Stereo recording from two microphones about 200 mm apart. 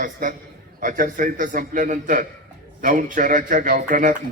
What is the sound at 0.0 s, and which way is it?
A man's voice, 40° right (ahead or behind).